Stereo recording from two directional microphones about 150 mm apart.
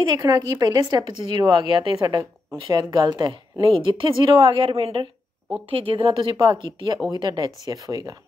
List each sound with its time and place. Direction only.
0.1 s a woman's voice: 25° right (ahead or behind)
6.3 s a woman's voice: 20° right (ahead or behind)
6.6 s a woman's voice: 35° right (ahead or behind)